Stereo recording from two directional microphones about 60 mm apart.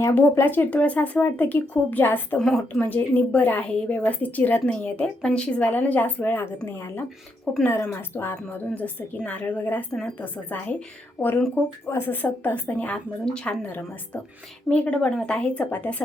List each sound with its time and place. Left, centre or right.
0.1 s speech: left
2.4 s speech: centre
2.8 s a woman's voice: left
6.7 s speech: left
8.4 s a woman's voice: left
13.7 s a woman's voice: left